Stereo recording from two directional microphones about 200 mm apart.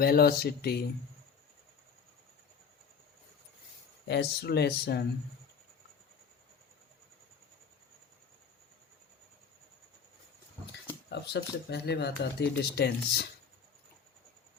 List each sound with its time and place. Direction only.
0.0 s speech: 50° left (ahead or behind)
4.0 s speech: 55° left (ahead or behind)
11.1 s speech: 55° left (ahead or behind)